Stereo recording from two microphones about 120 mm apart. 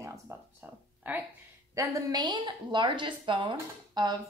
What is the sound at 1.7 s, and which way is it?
A woman's voice, 25° right (ahead or behind).